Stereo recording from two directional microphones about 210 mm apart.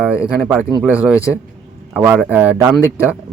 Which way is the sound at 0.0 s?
5° right (ahead or behind).